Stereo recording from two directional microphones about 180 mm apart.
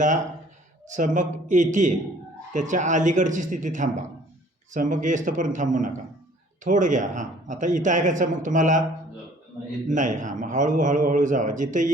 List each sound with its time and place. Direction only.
0.9 s speech: 45° right (ahead or behind)
9.9 s speech: 45° right (ahead or behind)